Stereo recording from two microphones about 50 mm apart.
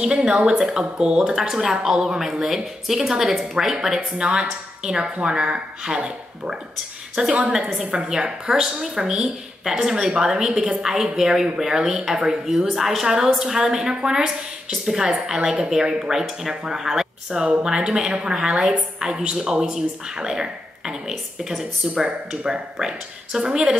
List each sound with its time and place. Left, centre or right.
0.0 s a woman's voice: centre
1.3 s a woman's voice: centre